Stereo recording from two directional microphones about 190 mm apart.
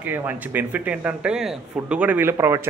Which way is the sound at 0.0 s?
10° right (ahead or behind).